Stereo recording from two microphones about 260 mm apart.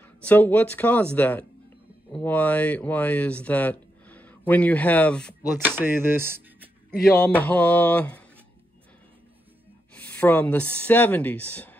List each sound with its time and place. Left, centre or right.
0.0 s speech: centre
5.8 s speech: centre
7.1 s speech: centre
9.9 s speech: centre